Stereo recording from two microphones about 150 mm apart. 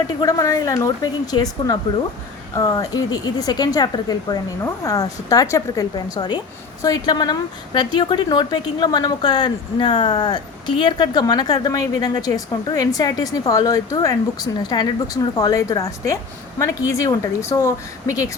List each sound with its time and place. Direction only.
0.2 s speech: 25° left (ahead or behind)